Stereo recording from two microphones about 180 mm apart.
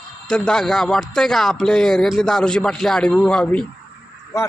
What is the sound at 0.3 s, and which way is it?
Speech, 5° left (ahead or behind).